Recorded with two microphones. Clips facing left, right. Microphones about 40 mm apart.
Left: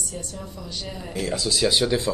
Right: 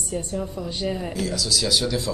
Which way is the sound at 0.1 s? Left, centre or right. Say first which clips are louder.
Right 7 dB; right.